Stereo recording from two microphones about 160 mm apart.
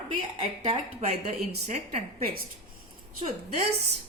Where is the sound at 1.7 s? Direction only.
40° right (ahead or behind).